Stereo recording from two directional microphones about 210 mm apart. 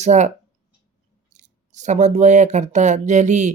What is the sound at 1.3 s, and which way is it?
Speech, 35° right (ahead or behind).